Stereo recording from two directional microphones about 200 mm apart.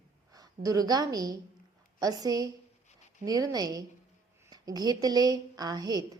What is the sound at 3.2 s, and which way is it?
A woman's voice, 20° right (ahead or behind).